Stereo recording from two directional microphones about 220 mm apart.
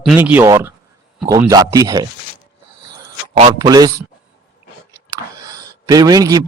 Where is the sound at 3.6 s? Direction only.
15° right (ahead or behind).